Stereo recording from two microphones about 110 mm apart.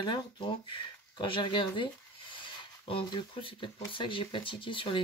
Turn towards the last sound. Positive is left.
turn(degrees=50)  # may be behind; listen again after turning